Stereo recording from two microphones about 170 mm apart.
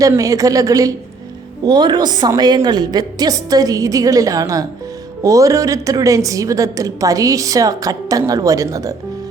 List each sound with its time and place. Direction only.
0.0 s a woman's voice: 20° right (ahead or behind)